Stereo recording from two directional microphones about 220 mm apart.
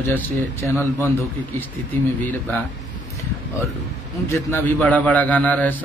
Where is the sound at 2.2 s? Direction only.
10° left (ahead or behind).